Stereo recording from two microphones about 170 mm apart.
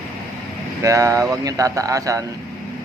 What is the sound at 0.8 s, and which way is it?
Speech, 20° right (ahead or behind).